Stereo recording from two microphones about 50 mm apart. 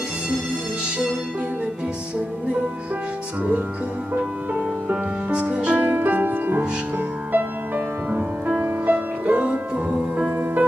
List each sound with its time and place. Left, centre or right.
5.3 s music: right
5.8 s music: right